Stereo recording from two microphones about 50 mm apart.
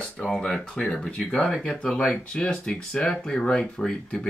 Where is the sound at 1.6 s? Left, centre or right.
Left.